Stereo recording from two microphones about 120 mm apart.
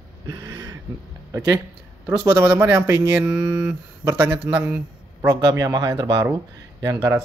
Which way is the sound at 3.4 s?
25° right (ahead or behind).